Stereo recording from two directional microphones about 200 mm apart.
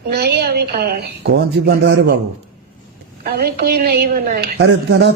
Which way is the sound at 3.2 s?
50° right (ahead or behind).